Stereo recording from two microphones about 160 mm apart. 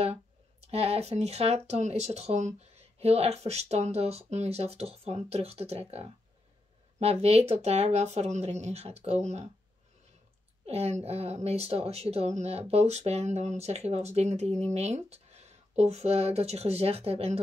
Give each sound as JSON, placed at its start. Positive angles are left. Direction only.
{"t": 0.0, "sound": "speech", "side_deg": -40}
{"t": 10.7, "sound": "speech", "side_deg": -40}